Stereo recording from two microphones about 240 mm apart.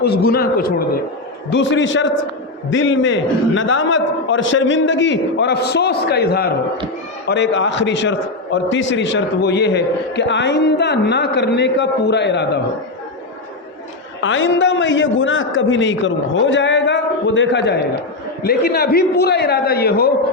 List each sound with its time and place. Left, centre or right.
0.0 s a man's voice: left
1.5 s a man's voice: left
14.2 s a man's voice: left